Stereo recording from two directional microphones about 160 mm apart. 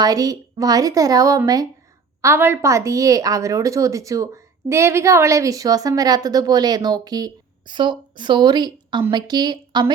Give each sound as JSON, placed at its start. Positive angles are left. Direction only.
{"t": 0.0, "sound": "a woman's voice", "side_deg": -20}